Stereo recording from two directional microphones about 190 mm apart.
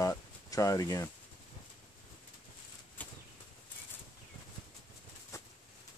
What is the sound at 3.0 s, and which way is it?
Bird flight, 10° left (ahead or behind).